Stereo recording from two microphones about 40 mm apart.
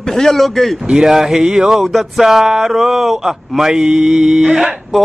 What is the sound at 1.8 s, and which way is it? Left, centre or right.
Speech, centre.